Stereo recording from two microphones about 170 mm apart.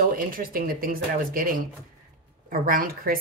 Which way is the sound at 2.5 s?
55° right (ahead or behind).